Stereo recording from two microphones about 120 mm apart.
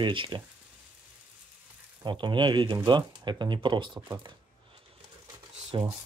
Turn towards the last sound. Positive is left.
turn(degrees=-40)  # may be behind; listen again after turning